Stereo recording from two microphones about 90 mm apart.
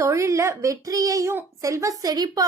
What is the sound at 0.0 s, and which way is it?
A child's voice, 35° right (ahead or behind).